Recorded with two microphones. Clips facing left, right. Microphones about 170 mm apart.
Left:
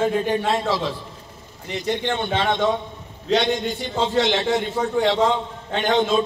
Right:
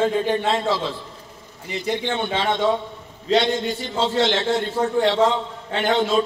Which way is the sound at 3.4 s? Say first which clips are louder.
Right 3 dB; 15° left (ahead or behind).